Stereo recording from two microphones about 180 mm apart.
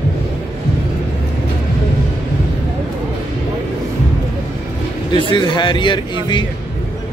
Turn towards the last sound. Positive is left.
turn(degrees=25)  # may be behind; listen again after turning